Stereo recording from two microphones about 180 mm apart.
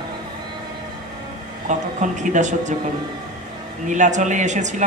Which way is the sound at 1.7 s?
45° right (ahead or behind).